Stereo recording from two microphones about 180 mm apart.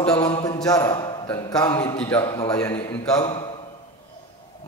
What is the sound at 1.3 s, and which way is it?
Speech, 15° left (ahead or behind).